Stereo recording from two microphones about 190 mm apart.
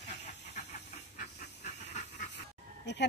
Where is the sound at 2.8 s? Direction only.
65° left (ahead or behind).